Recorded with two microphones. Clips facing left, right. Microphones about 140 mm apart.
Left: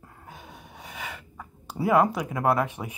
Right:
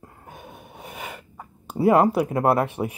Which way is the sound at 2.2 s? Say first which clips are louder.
Right 4 dB; 30° right (ahead or behind).